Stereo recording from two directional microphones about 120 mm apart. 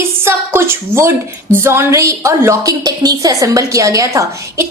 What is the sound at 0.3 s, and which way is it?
A woman's voice, 20° right (ahead or behind).